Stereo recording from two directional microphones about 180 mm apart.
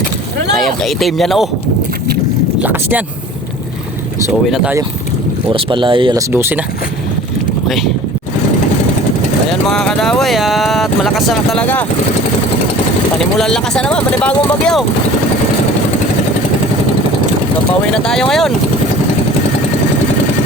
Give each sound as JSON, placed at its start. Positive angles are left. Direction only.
{"t": 0.5, "sound": "speech", "side_deg": 0}
{"t": 2.6, "sound": "speech", "side_deg": -10}
{"t": 4.4, "sound": "speech", "side_deg": 0}
{"t": 5.5, "sound": "speech", "side_deg": -30}
{"t": 6.3, "sound": "speech", "side_deg": -10}
{"t": 9.6, "sound": "speech", "side_deg": 0}
{"t": 13.1, "sound": "speech", "side_deg": 5}
{"t": 17.9, "sound": "speech", "side_deg": 5}